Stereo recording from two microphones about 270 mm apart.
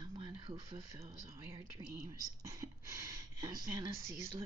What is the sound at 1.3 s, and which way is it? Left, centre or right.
Speech, centre.